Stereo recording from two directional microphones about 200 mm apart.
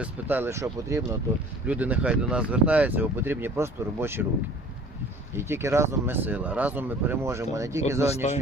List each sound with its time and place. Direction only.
0.0 s speech: 10° right (ahead or behind)
5.3 s speech: 10° right (ahead or behind)
8.1 s speech: 35° left (ahead or behind)